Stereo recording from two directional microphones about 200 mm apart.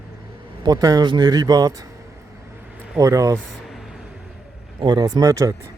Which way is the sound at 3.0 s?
15° right (ahead or behind).